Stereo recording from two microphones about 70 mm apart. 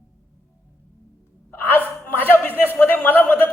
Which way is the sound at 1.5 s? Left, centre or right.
Left.